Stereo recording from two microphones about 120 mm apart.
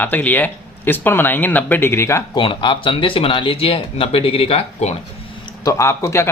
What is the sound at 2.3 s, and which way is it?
Speech, 45° left (ahead or behind).